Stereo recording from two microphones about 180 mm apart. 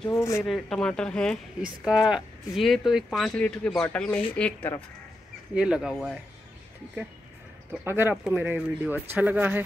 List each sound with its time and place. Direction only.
0.1 s speech: 15° left (ahead or behind)
0.4 s speech: centre (ahead or behind)
5.5 s speech: 5° right (ahead or behind)
7.7 s speech: 10° right (ahead or behind)